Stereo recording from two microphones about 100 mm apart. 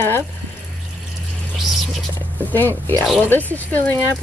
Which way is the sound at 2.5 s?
20° left (ahead or behind).